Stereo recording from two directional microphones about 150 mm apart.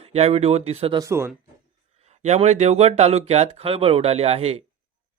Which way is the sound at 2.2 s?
50° right (ahead or behind).